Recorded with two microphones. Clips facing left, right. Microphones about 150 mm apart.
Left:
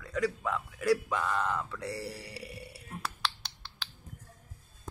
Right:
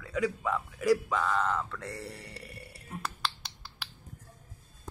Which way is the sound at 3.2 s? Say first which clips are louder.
Even; 5° right (ahead or behind).